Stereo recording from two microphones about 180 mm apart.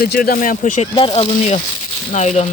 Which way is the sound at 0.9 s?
30° left (ahead or behind).